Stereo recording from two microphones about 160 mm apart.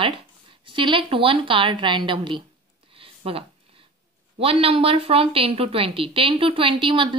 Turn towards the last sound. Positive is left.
turn(degrees=-30)  # may be behind; listen again after turning